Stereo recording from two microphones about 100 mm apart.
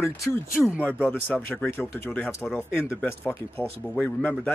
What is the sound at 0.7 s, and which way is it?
Speech, 20° left (ahead or behind).